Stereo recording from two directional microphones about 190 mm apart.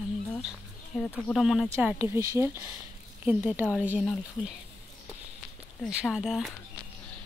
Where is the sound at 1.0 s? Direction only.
5° left (ahead or behind).